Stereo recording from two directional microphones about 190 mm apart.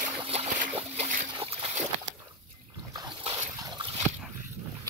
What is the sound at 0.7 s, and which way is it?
Splash, 35° right (ahead or behind).